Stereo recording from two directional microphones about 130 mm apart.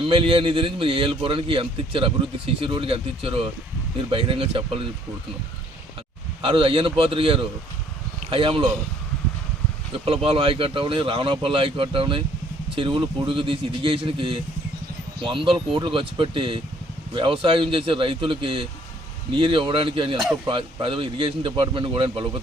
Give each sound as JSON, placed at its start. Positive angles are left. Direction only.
{"t": 0.1, "sound": "speech", "side_deg": -45}
{"t": 6.4, "sound": "speech", "side_deg": -40}
{"t": 10.1, "sound": "speech", "side_deg": -45}